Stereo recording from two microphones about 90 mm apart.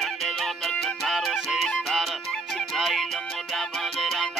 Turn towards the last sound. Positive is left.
turn(degrees=0)  # may be behind; listen again after turning